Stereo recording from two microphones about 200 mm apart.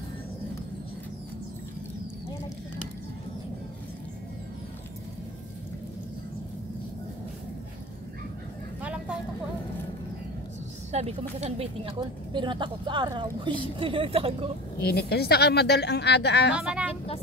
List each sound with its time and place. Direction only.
8.8 s vehicle: 5° right (ahead or behind)
10.9 s speech: 30° right (ahead or behind)
14.8 s a woman's voice: 55° left (ahead or behind)
16.5 s speech: 5° right (ahead or behind)